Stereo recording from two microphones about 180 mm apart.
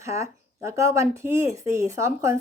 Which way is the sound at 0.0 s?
15° right (ahead or behind).